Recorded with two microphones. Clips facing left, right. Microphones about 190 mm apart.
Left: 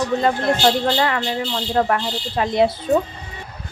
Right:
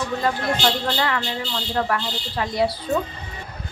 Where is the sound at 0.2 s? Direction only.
25° left (ahead or behind).